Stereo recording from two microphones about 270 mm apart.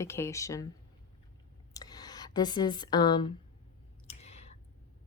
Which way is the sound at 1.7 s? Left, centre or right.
Centre.